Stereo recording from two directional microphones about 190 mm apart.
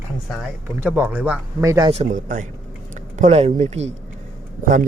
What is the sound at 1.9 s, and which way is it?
A man's voice, 40° right (ahead or behind).